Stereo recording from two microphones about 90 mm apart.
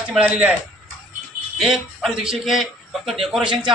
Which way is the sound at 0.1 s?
15° right (ahead or behind).